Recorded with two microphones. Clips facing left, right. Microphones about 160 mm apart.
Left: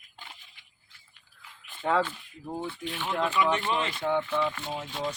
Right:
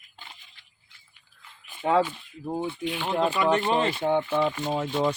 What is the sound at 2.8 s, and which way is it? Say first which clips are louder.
Speech: right 5 dB; centre (ahead or behind).